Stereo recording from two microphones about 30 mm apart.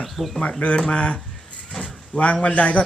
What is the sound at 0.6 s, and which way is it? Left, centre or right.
A man's voice, left.